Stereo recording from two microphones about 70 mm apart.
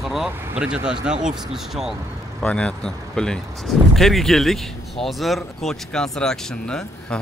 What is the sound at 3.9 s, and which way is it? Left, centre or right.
Speech, centre.